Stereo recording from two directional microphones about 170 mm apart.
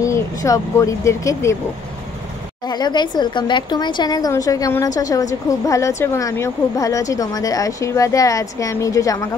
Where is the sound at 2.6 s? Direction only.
25° left (ahead or behind).